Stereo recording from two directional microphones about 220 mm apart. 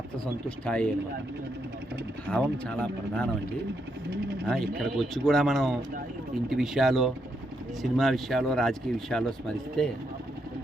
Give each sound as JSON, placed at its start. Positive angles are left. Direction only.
{"t": 0.4, "sound": "speech", "side_deg": 5}
{"t": 2.3, "sound": "speech", "side_deg": 5}
{"t": 4.4, "sound": "speech", "side_deg": 0}